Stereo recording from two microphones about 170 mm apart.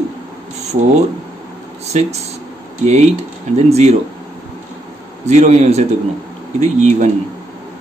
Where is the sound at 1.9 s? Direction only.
40° right (ahead or behind).